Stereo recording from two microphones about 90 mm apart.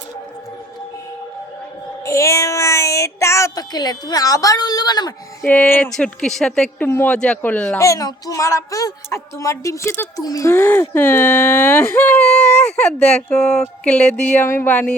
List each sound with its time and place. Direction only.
2.0 s speech: 35° left (ahead or behind); by 5.1 s 50° left (ahead or behind)
5.5 s speech: 20° left (ahead or behind)
6.0 s speech: 5° left (ahead or behind)
6.8 s speech: 20° left (ahead or behind)
7.8 s speech: 40° left (ahead or behind)
10.2 s speech: 40° left (ahead or behind)
10.5 s speech: 25° left (ahead or behind)
14.4 s speech: 25° left (ahead or behind)